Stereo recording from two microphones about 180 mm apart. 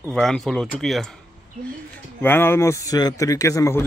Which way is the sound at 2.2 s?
10° left (ahead or behind).